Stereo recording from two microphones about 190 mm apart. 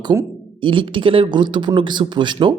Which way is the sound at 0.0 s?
20° right (ahead or behind).